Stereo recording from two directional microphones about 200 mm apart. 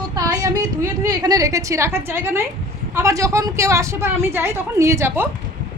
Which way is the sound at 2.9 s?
15° right (ahead or behind).